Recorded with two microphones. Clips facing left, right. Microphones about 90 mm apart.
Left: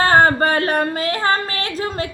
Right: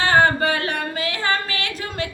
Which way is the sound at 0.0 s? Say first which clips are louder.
Left 3 dB; 40° left (ahead or behind).